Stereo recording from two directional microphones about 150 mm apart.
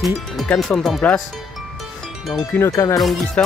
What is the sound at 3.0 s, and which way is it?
Speech, centre (ahead or behind).